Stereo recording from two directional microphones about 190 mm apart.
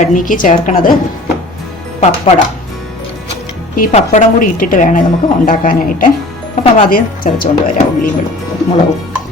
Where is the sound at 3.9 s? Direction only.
35° left (ahead or behind).